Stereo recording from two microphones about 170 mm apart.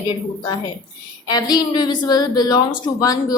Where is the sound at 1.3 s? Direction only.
25° left (ahead or behind).